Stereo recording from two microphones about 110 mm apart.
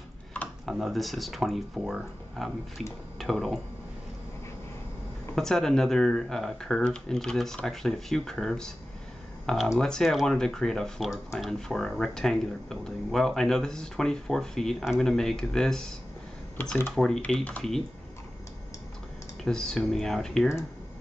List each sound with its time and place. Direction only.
0.7 s speech: centre (ahead or behind)
5.3 s speech: 5° left (ahead or behind)
16.5 s speech: 20° left (ahead or behind)
16.9 s speech: 5° left (ahead or behind)
19.4 s speech: 5° left (ahead or behind)